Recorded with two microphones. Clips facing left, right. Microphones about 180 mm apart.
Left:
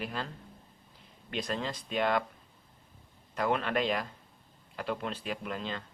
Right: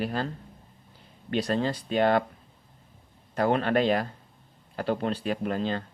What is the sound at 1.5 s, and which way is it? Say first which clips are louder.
Speech: right 7 dB; 35° right (ahead or behind).